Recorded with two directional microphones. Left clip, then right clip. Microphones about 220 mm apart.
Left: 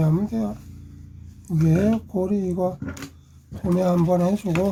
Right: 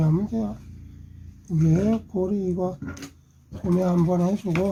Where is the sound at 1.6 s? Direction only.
25° left (ahead or behind).